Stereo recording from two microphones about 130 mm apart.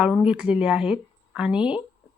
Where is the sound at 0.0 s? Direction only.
10° right (ahead or behind).